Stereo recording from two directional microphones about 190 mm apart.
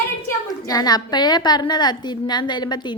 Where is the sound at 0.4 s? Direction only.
20° left (ahead or behind).